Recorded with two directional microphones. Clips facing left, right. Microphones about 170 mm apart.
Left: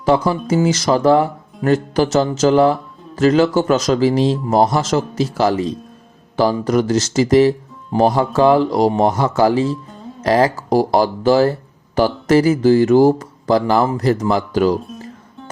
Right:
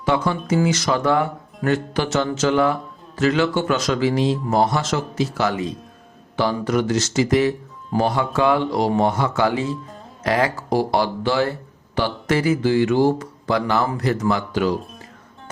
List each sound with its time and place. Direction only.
0.0 s speech: 35° left (ahead or behind)